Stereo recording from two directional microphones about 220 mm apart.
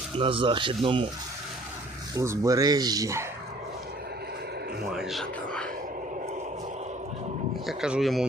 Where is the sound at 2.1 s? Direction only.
15° right (ahead or behind).